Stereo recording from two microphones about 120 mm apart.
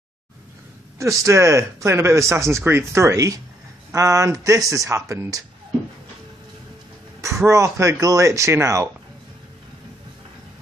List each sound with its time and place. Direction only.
0.9 s speech: 25° right (ahead or behind)
7.4 s speech: 25° right (ahead or behind)